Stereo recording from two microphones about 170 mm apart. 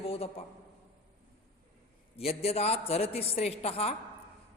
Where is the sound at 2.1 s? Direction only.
35° left (ahead or behind).